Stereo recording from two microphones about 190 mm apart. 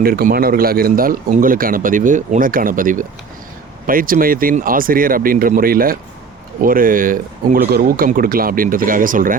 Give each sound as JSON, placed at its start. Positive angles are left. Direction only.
{"t": 0.0, "sound": "a man's voice", "side_deg": -50}